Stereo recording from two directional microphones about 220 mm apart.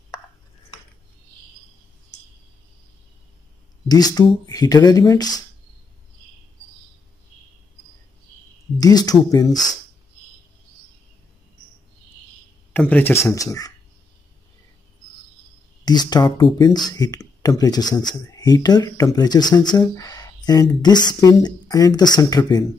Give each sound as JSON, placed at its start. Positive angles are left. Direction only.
{"t": 3.9, "sound": "speech", "side_deg": 15}
{"t": 8.7, "sound": "speech", "side_deg": 15}
{"t": 12.7, "sound": "speech", "side_deg": 10}
{"t": 15.8, "sound": "speech", "side_deg": 20}